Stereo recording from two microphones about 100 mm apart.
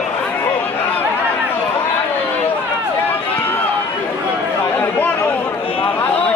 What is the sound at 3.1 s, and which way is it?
Run, 20° left (ahead or behind).